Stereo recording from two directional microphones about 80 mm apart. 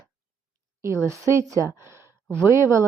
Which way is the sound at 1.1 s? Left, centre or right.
Right.